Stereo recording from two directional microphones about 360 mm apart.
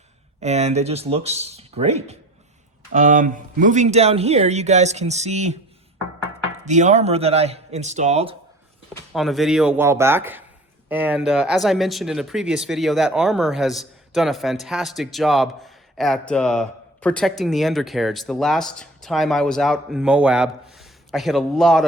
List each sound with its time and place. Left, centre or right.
0.3 s speech: centre
6.7 s speech: centre
9.1 s speech: centre